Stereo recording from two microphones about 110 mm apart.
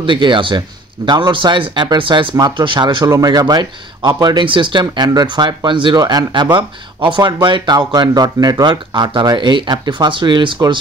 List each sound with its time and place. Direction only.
0.0 s speech: 45° right (ahead or behind)
3.1 s a man's voice: 35° right (ahead or behind)